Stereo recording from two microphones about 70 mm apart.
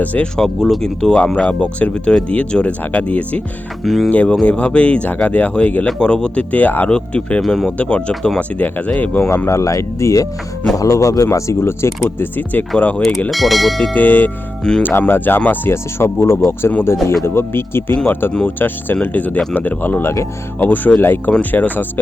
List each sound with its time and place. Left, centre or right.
0.0 s speech: left
0.3 s speech: centre
3.8 s speech: centre
4.1 s speech: centre
7.4 s speech: centre
7.8 s speech: centre
9.5 s speech: left
11.3 s speech: left
13.3 s speech: centre
13.9 s speech: left
15.7 s speech: left
20.6 s speech: left